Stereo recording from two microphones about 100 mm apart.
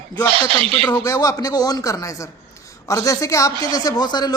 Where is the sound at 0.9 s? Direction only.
35° left (ahead or behind).